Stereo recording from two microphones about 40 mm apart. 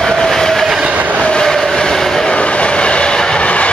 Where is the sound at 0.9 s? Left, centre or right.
Right.